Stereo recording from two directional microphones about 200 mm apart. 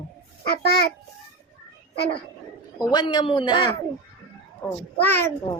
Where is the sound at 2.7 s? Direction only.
20° left (ahead or behind).